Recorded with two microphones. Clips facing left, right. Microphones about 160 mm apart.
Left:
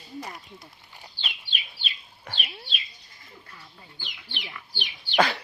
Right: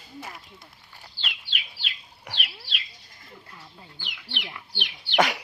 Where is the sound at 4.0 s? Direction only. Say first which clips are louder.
Right 3 dB; 70° right (ahead or behind).